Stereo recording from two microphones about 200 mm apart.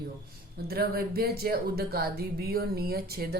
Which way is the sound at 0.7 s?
50° right (ahead or behind).